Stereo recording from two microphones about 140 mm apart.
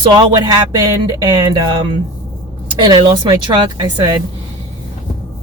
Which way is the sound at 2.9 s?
35° right (ahead or behind).